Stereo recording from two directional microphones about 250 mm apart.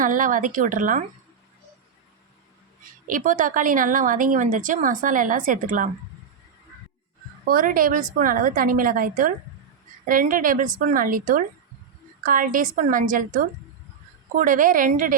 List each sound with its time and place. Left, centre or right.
0.0 s a woman's voice: right
3.1 s a woman's voice: right
7.4 s a woman's voice: right